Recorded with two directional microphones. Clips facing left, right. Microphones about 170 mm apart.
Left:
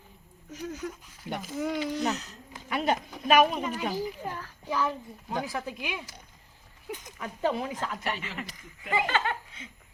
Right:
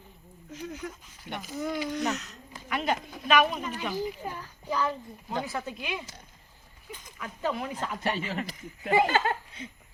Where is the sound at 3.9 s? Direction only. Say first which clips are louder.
Even; 5° right (ahead or behind).